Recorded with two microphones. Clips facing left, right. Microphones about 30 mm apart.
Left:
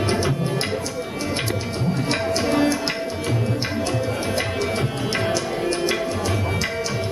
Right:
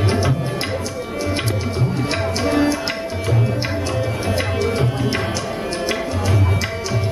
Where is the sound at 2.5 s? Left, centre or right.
Centre.